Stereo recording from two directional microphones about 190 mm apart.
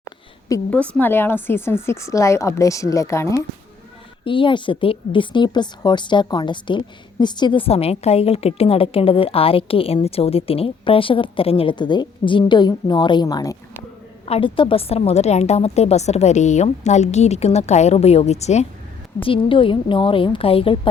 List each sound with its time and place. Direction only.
0.7 s a woman's voice: 5° left (ahead or behind)
4.2 s a woman's voice: 25° left (ahead or behind)
14.3 s a woman's voice: 30° left (ahead or behind)